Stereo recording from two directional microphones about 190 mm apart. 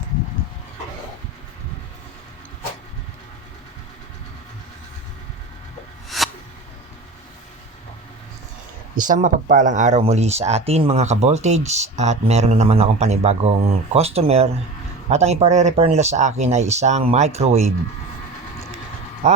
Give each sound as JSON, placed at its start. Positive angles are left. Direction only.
{"t": 6.1, "sound": "a sound", "side_deg": 0}
{"t": 9.0, "sound": "speech", "side_deg": -45}
{"t": 19.2, "sound": "speech", "side_deg": -40}